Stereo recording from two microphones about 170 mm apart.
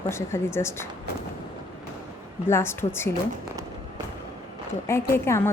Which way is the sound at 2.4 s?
15° left (ahead or behind).